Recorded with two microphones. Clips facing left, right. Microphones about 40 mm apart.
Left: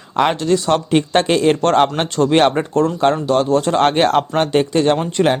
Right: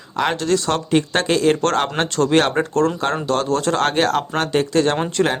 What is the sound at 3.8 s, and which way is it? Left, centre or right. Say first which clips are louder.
Speech: left 5 dB; left.